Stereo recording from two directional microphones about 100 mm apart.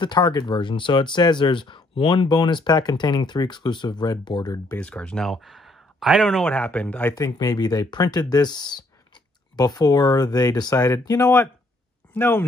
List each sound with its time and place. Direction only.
0.0 s speech: 50° left (ahead or behind)
4.7 s speech: 10° left (ahead or behind)
6.4 s a man's voice: 15° left (ahead or behind)
7.2 s speech: 35° left (ahead or behind)